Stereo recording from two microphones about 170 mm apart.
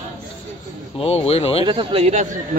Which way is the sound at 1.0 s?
35° left (ahead or behind).